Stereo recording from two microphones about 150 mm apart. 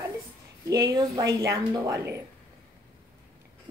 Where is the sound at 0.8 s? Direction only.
25° right (ahead or behind).